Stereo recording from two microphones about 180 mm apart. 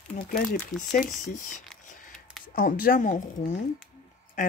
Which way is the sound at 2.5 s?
50° left (ahead or behind).